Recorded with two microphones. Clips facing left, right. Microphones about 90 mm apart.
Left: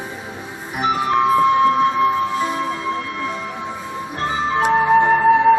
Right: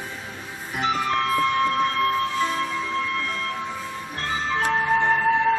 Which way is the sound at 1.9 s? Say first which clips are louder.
Left 5 dB; 15° left (ahead or behind).